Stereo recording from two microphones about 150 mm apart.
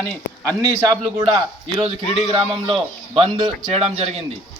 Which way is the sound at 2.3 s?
35° right (ahead or behind).